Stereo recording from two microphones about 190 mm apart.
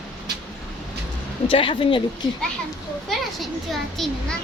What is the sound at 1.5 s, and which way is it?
Speech, 30° left (ahead or behind).